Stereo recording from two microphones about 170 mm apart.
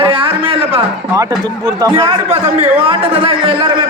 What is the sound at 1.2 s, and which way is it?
Speech, 20° right (ahead or behind).